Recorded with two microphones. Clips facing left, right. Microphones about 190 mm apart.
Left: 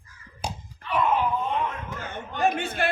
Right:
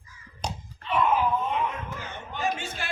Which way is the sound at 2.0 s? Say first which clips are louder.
Left 6 dB; 60° left (ahead or behind).